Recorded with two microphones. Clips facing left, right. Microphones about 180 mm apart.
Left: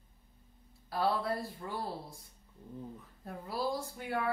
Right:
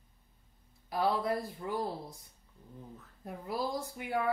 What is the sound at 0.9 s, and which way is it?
Speech, 15° right (ahead or behind).